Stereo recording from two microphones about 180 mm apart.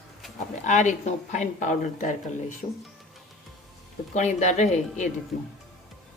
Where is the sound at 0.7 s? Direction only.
40° left (ahead or behind).